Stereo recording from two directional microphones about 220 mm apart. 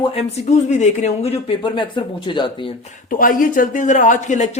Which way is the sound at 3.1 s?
40° left (ahead or behind).